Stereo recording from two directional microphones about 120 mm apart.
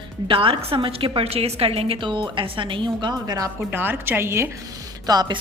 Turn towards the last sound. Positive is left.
turn(degrees=-35)  # may be behind; listen again after turning